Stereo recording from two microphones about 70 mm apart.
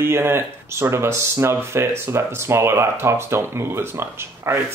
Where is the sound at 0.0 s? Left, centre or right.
Right.